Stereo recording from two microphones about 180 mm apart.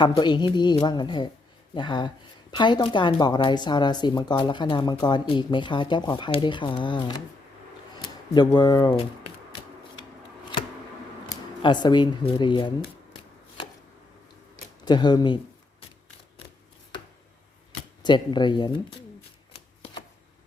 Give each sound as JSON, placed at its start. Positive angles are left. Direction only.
{"t": 0.0, "sound": "speech", "side_deg": 25}
{"t": 8.0, "sound": "a sound", "side_deg": 25}
{"t": 8.5, "sound": "speech", "side_deg": 25}
{"t": 11.3, "sound": "speech", "side_deg": 25}
{"t": 14.8, "sound": "speech", "side_deg": 25}
{"t": 18.0, "sound": "speech", "side_deg": 25}